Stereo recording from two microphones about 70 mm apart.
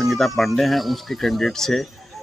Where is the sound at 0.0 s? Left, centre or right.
Centre.